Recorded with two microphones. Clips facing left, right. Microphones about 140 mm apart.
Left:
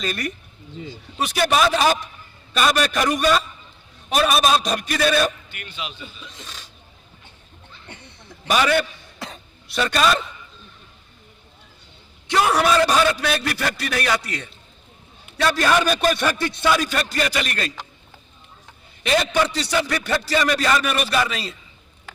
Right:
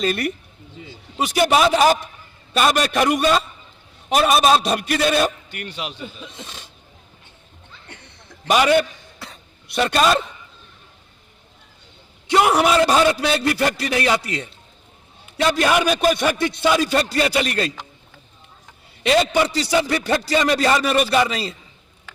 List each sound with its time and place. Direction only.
1.4 s a man's voice: 20° right (ahead or behind)
5.5 s speech: 50° right (ahead or behind)
6.4 s speech: 25° right (ahead or behind)
8.4 s a man's voice: 15° right (ahead or behind)
12.3 s a man's voice: 20° right (ahead or behind)
19.3 s a man's voice: 20° right (ahead or behind)